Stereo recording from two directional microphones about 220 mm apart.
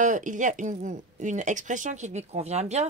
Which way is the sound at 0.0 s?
35° right (ahead or behind).